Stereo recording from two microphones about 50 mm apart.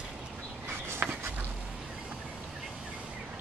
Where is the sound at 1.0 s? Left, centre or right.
Right.